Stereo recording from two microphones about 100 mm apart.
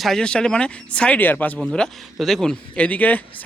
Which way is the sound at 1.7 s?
5° left (ahead or behind).